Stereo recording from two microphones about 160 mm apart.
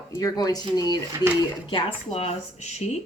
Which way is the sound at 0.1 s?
20° left (ahead or behind).